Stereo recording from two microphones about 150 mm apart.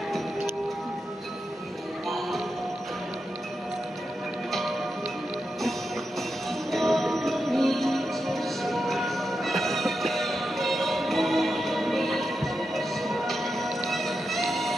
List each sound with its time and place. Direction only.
2.0 s music: centre (ahead or behind)
4.5 s music: centre (ahead or behind)
6.7 s music: centre (ahead or behind)